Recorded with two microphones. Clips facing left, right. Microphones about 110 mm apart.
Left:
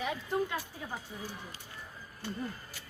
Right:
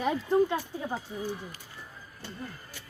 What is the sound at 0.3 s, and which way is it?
Speech, 25° right (ahead or behind).